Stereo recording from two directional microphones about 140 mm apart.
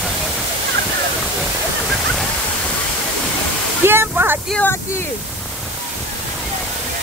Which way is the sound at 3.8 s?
15° right (ahead or behind).